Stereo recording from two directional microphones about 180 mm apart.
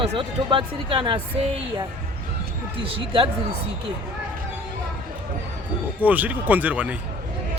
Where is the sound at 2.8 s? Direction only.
30° right (ahead or behind).